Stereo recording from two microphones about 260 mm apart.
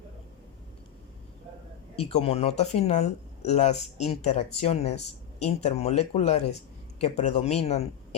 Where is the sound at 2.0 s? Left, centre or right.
Left.